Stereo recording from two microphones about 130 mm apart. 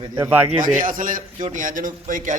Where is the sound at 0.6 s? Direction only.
90° right.